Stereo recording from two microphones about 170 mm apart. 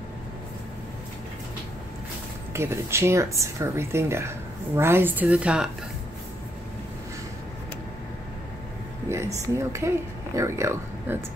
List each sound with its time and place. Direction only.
2.5 s speech: 15° right (ahead or behind)
9.1 s speech: 15° right (ahead or behind)